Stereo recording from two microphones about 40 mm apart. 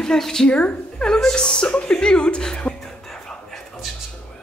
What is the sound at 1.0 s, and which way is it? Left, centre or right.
Speech, centre.